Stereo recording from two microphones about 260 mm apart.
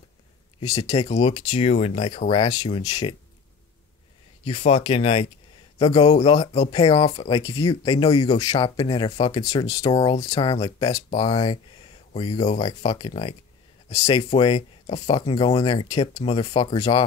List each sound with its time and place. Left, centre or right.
0.6 s speech: centre
4.5 s speech: left